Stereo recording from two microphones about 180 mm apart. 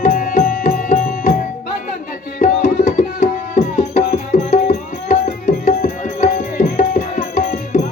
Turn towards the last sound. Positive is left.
turn(degrees=40)  # may be behind; listen again after turning